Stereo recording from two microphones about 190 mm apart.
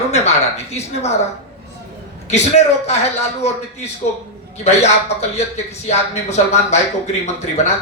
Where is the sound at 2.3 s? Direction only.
35° left (ahead or behind).